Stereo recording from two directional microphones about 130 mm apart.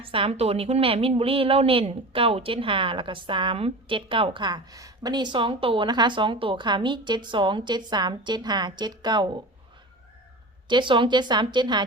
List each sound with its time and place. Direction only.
0.0 s a woman's voice: 45° right (ahead or behind)
10.7 s a woman's voice: 40° right (ahead or behind)